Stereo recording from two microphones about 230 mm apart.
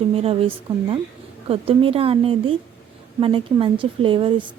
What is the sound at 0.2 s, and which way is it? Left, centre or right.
Speech, right.